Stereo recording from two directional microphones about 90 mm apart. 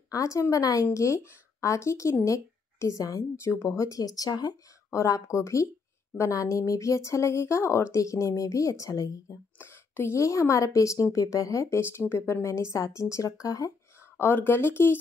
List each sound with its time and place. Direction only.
0.1 s a woman's voice: 35° left (ahead or behind)
9.6 s a woman's voice: 25° left (ahead or behind)